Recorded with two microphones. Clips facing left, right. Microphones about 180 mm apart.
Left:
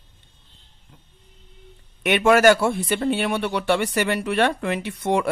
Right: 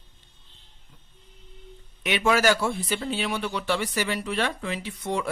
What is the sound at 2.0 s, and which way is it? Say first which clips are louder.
Speech: left 7 dB; 55° left (ahead or behind).